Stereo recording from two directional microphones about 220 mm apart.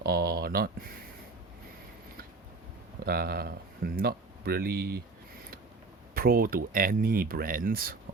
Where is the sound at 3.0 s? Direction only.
45° right (ahead or behind).